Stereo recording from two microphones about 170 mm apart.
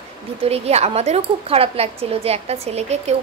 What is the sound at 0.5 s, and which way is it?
A woman's voice, 40° right (ahead or behind).